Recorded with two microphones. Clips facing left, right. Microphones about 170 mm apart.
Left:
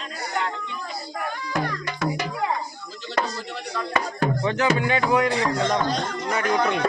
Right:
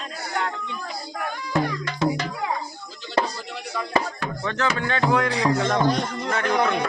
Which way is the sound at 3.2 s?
30° right (ahead or behind).